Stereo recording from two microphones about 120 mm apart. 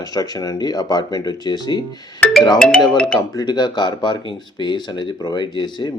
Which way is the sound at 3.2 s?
35° left (ahead or behind).